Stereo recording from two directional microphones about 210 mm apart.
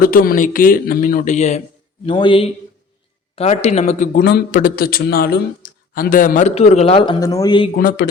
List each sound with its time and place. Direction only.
0.0 s a man's voice: 45° left (ahead or behind); by 7.7 s 20° left (ahead or behind)
7.8 s a man's voice: 40° left (ahead or behind)